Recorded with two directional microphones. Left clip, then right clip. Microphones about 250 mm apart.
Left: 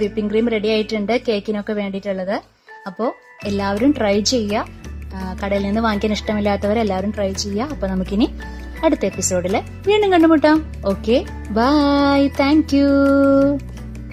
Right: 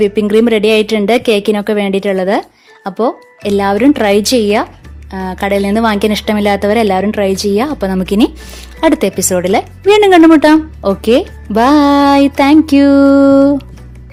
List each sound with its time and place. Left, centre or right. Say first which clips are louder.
0.0 s a woman's voice: right 9 dB; right